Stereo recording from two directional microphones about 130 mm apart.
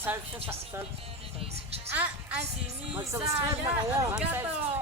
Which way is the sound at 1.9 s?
15° right (ahead or behind).